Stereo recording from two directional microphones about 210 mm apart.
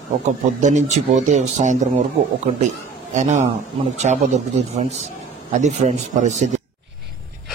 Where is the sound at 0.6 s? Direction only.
35° right (ahead or behind).